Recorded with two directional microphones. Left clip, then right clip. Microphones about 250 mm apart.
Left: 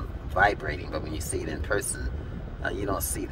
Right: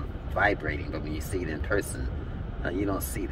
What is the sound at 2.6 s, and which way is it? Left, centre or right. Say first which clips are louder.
Speech: even; centre.